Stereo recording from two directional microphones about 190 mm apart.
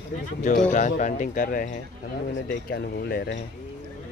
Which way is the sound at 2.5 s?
60° left (ahead or behind).